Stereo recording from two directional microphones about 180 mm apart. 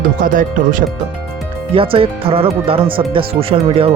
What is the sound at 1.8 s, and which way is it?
Speech, 30° right (ahead or behind).